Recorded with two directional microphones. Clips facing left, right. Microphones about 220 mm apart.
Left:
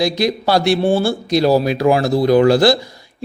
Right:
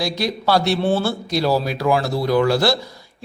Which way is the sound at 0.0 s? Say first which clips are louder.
Left 5 dB; 15° left (ahead or behind).